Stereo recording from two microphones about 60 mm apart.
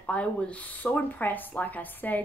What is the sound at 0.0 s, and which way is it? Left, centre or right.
A woman's voice, centre.